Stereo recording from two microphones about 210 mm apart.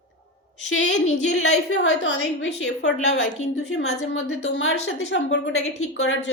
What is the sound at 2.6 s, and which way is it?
Speech, 65° left (ahead or behind).